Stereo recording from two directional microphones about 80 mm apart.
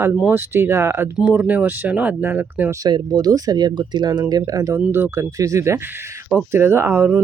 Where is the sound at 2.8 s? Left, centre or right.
Right.